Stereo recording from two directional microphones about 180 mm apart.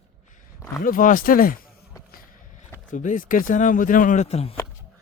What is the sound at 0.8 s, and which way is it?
Speech, 50° left (ahead or behind).